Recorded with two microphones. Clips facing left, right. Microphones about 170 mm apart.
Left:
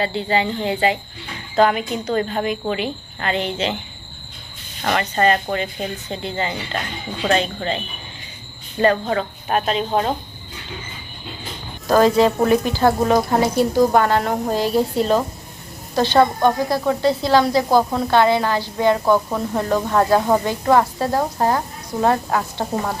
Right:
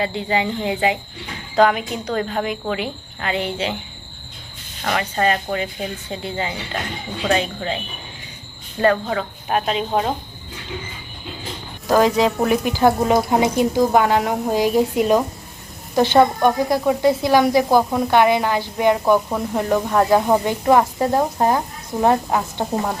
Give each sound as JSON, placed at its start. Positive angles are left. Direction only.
{"t": 0.0, "sound": "speech", "side_deg": -15}
{"t": 1.5, "sound": "speech", "side_deg": 0}
{"t": 4.8, "sound": "speech", "side_deg": 0}
{"t": 8.9, "sound": "speech", "side_deg": -5}
{"t": 11.9, "sound": "speech", "side_deg": -15}